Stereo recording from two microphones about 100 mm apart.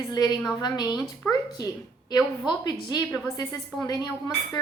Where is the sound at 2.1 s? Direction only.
40° left (ahead or behind).